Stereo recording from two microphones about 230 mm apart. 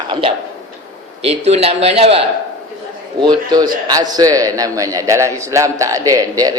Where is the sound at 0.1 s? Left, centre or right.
Right.